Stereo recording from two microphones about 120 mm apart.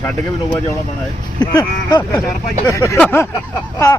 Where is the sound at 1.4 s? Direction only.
30° left (ahead or behind).